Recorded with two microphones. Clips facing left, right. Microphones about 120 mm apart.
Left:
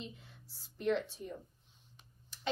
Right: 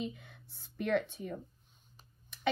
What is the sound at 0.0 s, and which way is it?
A woman's voice, 60° right (ahead or behind).